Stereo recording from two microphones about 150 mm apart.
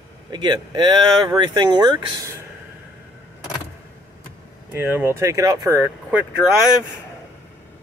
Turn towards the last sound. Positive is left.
turn(degrees=-5)  # may be behind; listen again after turning